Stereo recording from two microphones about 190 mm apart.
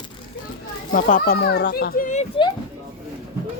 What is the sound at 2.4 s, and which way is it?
Speech, 30° left (ahead or behind).